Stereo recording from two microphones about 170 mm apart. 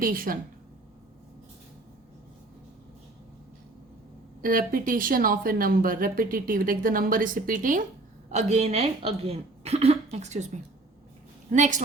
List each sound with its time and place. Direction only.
0.0 s speech: 55° right (ahead or behind)
4.4 s speech: 55° right (ahead or behind)
11.5 s a woman's voice: 45° right (ahead or behind)